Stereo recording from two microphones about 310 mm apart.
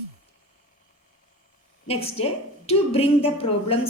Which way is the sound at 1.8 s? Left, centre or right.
Centre.